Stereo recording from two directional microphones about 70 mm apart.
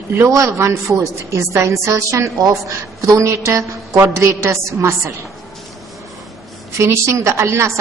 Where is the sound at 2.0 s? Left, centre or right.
Right.